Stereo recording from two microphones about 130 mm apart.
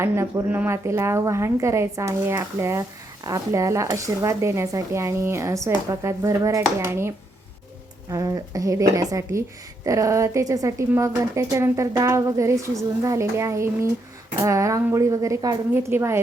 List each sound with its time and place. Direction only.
0.0 s speech: 20° right (ahead or behind)
8.1 s speech: 25° right (ahead or behind)